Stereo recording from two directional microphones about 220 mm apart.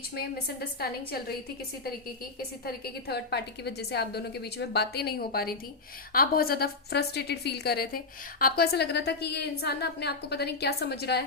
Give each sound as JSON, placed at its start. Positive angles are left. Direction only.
{"t": 0.1, "sound": "a woman's voice", "side_deg": 45}
{"t": 2.6, "sound": "a woman's voice", "side_deg": 45}